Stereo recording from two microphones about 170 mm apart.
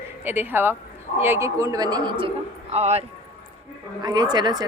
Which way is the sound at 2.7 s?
40° right (ahead or behind).